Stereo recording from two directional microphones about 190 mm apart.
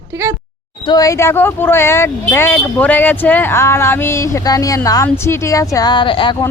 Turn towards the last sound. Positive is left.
turn(degrees=25)  # may be behind; listen again after turning